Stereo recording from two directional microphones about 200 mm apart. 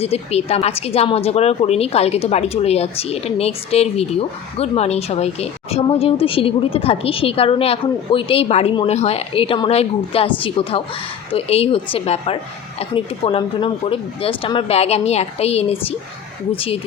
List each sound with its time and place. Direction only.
0.0 s a woman's voice: 30° left (ahead or behind)